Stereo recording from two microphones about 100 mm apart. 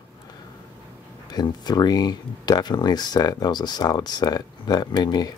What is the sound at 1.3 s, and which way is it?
Speech, 45° left (ahead or behind).